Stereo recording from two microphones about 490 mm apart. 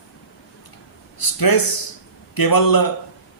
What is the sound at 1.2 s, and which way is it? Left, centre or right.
A man's voice, left.